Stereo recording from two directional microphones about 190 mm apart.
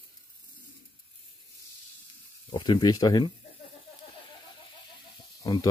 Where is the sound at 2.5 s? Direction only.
25° left (ahead or behind).